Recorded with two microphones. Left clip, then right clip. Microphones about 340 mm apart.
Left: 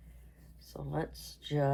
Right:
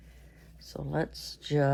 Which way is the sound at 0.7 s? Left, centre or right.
Right.